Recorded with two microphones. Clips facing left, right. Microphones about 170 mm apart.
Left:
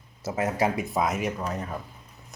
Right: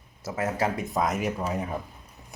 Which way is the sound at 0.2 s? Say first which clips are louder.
Left 2 dB; 20° left (ahead or behind).